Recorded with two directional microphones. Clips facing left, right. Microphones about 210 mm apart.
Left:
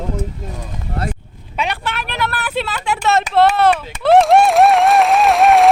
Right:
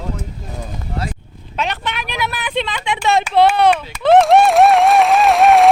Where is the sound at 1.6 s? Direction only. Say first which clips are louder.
Even; 10° left (ahead or behind).